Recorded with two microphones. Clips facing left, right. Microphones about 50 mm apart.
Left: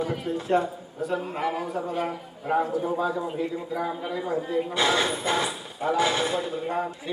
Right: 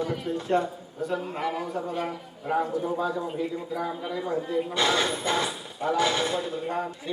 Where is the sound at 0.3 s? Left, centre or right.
Centre.